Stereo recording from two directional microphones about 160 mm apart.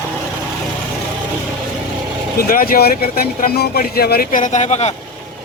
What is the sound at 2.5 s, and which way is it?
Speech, 65° left (ahead or behind).